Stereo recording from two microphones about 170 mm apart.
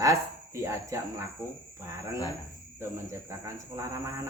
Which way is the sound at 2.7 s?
15° right (ahead or behind).